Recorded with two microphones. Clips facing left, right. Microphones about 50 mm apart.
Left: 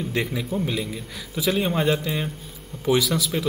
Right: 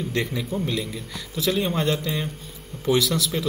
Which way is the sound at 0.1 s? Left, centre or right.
Centre.